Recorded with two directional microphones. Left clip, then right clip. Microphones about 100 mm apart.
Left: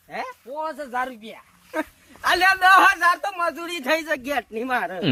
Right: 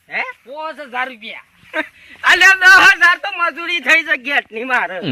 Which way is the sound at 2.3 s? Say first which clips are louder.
Right 8 dB; 15° left (ahead or behind).